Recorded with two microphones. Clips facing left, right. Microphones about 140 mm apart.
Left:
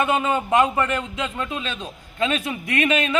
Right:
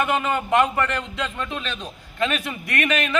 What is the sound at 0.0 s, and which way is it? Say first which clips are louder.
A man's voice: left 2 dB; 15° left (ahead or behind).